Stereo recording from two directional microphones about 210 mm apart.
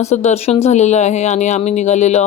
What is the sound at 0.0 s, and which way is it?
A woman's voice, 30° left (ahead or behind).